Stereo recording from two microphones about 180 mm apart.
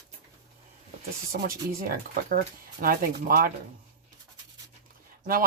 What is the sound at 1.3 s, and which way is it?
Speech, 55° right (ahead or behind).